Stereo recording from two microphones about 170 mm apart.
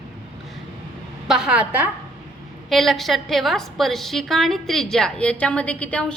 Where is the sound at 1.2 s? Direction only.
5° right (ahead or behind).